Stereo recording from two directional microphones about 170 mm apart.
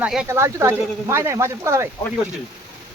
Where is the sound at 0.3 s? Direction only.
15° right (ahead or behind).